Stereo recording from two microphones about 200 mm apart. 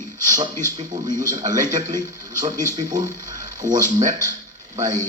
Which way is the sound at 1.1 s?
40° right (ahead or behind).